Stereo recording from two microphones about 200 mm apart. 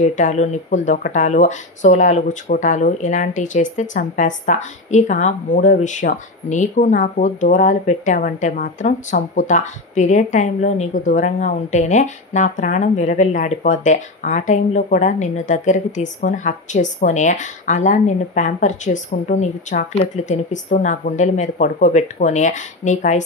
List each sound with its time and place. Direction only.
0.0 s speech: 35° left (ahead or behind)